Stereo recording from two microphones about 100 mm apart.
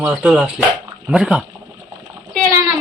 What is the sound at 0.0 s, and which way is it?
Speech, 10° right (ahead or behind).